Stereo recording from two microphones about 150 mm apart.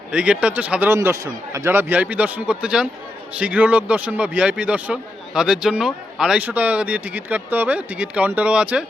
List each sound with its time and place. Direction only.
0.1 s speech: 10° right (ahead or behind)